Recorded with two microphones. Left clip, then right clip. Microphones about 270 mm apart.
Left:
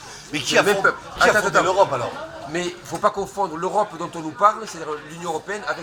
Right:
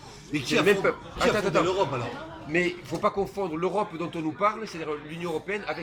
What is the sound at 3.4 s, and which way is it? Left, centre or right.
Speech, centre.